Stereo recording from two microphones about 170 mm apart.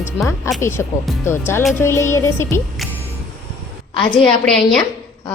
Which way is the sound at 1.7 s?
15° left (ahead or behind).